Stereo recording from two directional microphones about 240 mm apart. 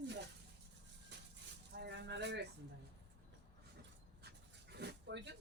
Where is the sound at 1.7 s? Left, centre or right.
Right.